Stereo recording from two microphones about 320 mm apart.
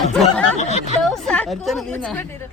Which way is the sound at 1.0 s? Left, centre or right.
Centre.